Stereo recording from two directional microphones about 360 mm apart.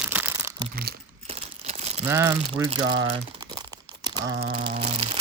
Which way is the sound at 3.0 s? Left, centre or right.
Centre.